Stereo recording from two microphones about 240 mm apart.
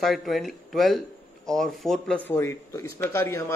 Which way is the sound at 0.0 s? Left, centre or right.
Centre.